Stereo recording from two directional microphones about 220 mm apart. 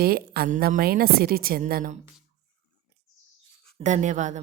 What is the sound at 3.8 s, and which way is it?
Speech, 35° right (ahead or behind).